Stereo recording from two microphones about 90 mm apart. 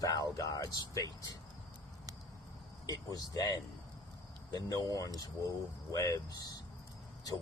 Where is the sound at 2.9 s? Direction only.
45° left (ahead or behind).